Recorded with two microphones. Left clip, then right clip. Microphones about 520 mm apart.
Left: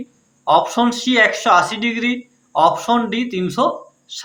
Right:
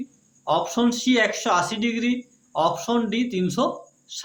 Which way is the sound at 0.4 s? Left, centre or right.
Right.